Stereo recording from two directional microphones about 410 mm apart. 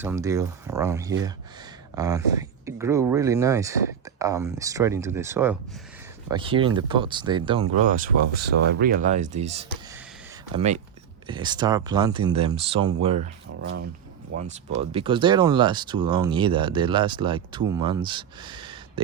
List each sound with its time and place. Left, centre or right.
0.0 s speech: centre